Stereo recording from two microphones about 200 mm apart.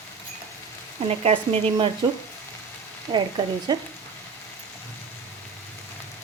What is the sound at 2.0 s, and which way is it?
Speech, 20° right (ahead or behind).